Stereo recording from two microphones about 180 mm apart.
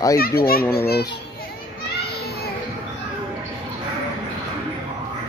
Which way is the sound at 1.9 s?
60° left (ahead or behind).